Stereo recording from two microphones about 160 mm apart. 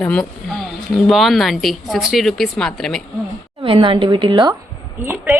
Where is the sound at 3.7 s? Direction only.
30° right (ahead or behind).